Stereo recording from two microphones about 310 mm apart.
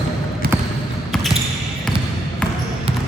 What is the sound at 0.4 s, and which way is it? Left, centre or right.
Basketball bounce, right.